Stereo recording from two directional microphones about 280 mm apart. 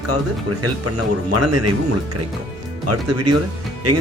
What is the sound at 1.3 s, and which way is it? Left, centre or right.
Speech, right.